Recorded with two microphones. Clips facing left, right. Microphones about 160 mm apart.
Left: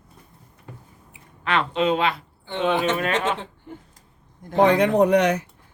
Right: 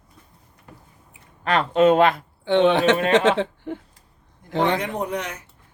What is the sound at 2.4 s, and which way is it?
Speech, 75° right (ahead or behind).